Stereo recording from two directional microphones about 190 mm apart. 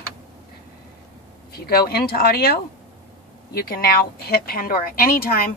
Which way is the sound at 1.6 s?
55° left (ahead or behind).